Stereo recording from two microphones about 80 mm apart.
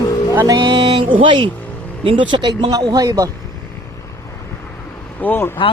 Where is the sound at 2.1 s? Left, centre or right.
Right.